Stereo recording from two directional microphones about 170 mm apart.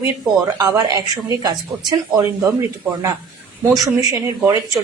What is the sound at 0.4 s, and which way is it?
Speech, 20° right (ahead or behind).